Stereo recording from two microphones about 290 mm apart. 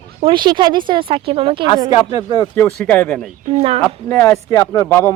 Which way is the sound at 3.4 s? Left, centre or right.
Right.